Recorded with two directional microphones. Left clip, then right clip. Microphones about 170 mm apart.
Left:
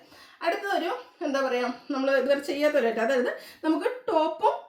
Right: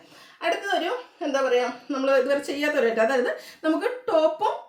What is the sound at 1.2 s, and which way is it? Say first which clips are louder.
Speech: right 4 dB; 15° right (ahead or behind).